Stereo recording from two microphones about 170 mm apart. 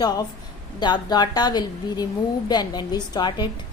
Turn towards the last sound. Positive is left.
turn(degrees=25)  # may be behind; listen again after turning